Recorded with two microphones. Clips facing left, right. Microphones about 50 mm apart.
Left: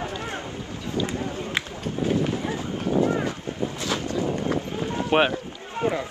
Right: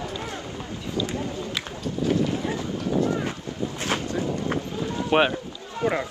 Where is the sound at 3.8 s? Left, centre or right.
Right.